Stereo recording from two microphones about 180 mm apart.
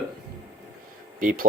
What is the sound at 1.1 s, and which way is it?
Speech, 50° right (ahead or behind).